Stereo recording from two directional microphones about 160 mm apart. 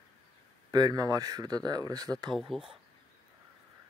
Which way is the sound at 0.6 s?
25° right (ahead or behind).